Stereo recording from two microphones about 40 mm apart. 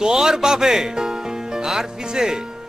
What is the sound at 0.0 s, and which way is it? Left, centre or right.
Speech, centre.